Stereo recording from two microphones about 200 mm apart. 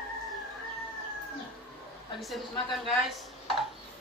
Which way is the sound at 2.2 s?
Centre (ahead or behind).